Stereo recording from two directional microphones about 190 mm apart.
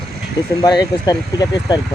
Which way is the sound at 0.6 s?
20° left (ahead or behind).